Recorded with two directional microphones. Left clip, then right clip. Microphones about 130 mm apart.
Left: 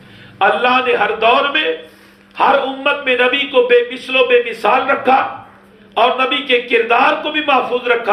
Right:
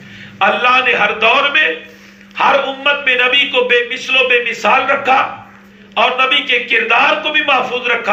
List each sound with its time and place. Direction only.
0.3 s a man's voice: 40° left (ahead or behind)